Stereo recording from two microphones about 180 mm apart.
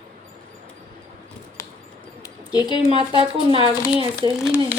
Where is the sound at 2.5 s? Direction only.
20° left (ahead or behind).